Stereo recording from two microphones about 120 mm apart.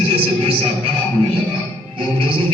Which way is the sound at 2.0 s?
45° right (ahead or behind).